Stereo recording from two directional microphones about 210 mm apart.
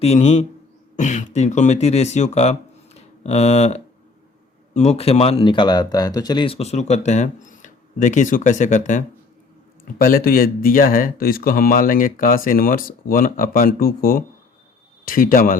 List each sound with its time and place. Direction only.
0.0 s speech: 30° left (ahead or behind)